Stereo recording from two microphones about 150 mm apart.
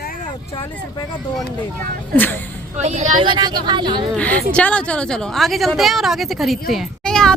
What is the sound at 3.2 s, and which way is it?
Speech, 30° right (ahead or behind).